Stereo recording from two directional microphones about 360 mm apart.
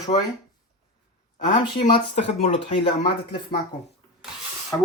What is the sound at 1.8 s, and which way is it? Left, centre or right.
A man's voice, centre.